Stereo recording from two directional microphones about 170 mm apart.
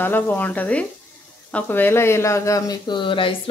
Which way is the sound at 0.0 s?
10° left (ahead or behind).